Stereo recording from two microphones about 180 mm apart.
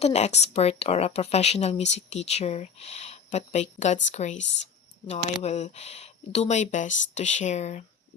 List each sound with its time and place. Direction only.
0.0 s a woman's voice: 35° left (ahead or behind)